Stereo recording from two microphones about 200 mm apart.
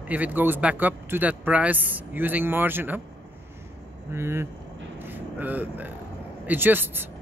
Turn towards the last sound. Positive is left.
turn(degrees=-10)  # may be behind; listen again after turning